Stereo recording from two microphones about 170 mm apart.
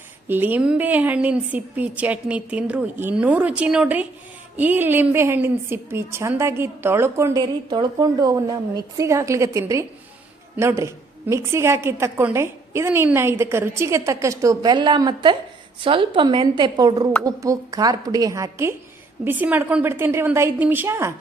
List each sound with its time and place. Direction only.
0.3 s a woman's voice: 10° right (ahead or behind)